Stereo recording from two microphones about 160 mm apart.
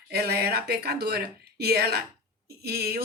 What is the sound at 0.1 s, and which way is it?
A woman's voice, 75° right (ahead or behind).